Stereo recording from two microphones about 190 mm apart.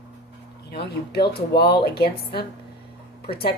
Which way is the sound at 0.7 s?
60° left (ahead or behind).